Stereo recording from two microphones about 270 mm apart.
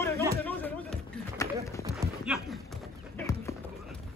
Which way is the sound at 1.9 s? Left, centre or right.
Centre.